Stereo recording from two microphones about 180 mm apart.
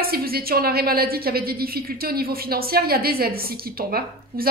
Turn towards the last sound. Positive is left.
turn(degrees=-55)  # may be behind; listen again after turning